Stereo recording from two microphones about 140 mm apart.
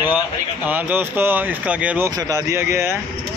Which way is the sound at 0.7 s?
10° right (ahead or behind).